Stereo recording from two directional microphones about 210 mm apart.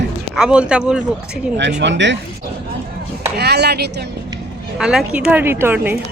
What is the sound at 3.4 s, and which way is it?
Speech, 50° right (ahead or behind).